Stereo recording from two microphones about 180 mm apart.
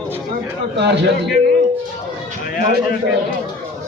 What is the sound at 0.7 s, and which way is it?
Speech, 75° right (ahead or behind).